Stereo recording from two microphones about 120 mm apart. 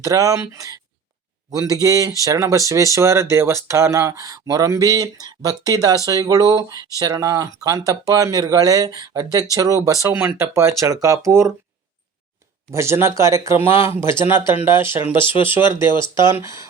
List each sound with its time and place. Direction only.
0.0 s speech: 30° right (ahead or behind)
12.7 s speech: 25° right (ahead or behind)
15.9 s speech: 40° left (ahead or behind)
16.3 s speech: 25° right (ahead or behind)